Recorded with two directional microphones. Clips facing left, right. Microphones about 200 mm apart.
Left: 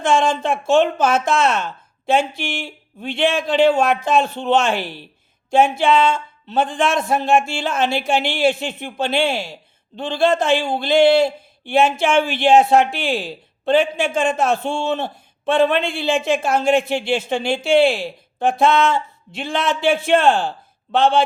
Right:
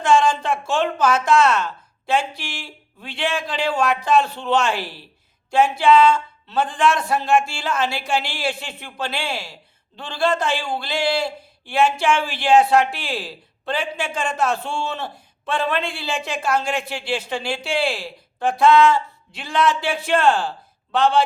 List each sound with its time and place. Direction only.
0.0 s speech: 25° left (ahead or behind)